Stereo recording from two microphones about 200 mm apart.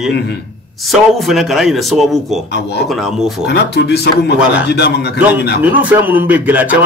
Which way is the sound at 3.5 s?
55° left (ahead or behind).